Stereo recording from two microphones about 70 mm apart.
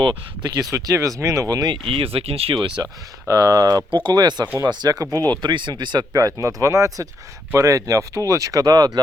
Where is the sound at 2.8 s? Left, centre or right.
Right.